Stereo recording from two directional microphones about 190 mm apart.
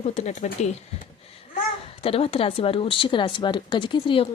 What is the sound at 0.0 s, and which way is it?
Speech, 40° left (ahead or behind).